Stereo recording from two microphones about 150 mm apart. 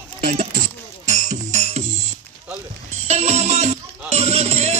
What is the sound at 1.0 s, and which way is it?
Music, 50° right (ahead or behind).